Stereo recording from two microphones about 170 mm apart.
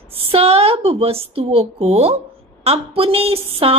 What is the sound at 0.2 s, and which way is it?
A woman's voice, 35° right (ahead or behind).